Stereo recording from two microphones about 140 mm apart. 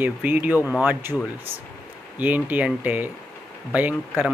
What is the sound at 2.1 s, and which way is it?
Speech, 10° right (ahead or behind).